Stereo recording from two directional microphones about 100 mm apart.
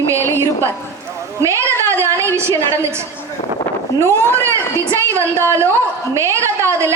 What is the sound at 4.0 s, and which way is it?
Speech, 25° right (ahead or behind).